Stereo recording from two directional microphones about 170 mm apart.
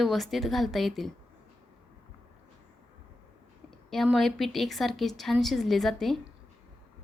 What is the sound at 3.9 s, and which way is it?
A woman's voice, centre (ahead or behind).